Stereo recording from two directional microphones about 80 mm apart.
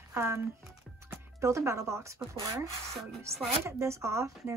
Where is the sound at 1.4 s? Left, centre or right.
Right.